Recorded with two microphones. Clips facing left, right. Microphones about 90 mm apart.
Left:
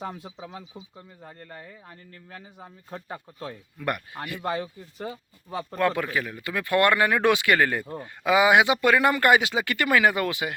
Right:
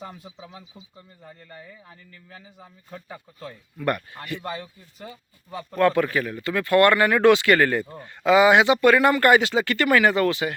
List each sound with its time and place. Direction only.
0.2 s speech: 40° left (ahead or behind)
1.3 s speech: 55° left (ahead or behind)
3.8 s speech: 15° left (ahead or behind)
5.7 s speech: 15° left (ahead or behind)